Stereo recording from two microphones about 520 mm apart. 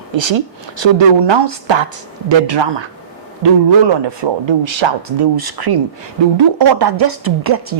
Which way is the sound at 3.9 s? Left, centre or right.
Right.